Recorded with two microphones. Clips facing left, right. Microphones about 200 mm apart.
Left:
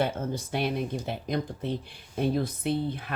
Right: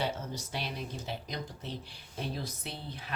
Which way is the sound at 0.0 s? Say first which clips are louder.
Left 7 dB; 55° left (ahead or behind).